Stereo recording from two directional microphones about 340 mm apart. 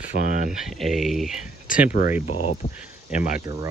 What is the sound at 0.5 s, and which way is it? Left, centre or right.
Speech, centre.